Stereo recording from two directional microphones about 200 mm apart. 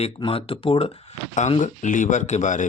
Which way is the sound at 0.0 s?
30° left (ahead or behind).